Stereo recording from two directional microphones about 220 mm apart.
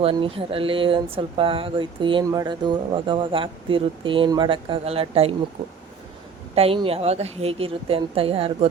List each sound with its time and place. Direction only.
0.0 s speech: 25° right (ahead or behind)
6.5 s speech: 25° right (ahead or behind)